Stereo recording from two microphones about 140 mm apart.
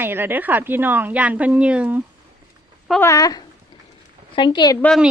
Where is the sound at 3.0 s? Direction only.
25° left (ahead or behind).